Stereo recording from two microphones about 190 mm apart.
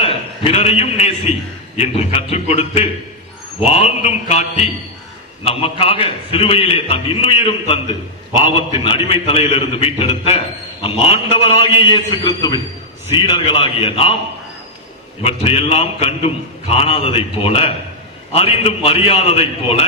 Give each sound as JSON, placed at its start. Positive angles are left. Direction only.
{"t": 0.0, "sound": "a man's voice", "side_deg": 30}
{"t": 15.2, "sound": "a man's voice", "side_deg": 30}